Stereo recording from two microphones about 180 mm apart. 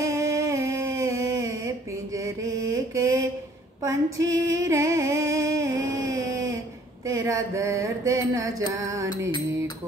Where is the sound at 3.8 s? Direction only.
15° right (ahead or behind).